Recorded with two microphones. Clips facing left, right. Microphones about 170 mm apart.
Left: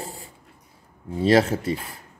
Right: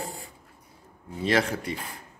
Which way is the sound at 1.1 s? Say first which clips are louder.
Left 7 dB; 35° left (ahead or behind).